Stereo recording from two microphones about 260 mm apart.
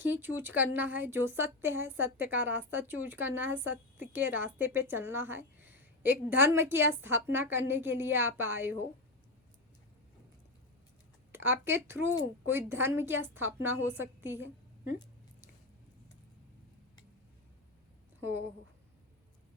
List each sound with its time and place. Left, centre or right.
0.0 s a woman's voice: centre
11.3 s a woman's voice: centre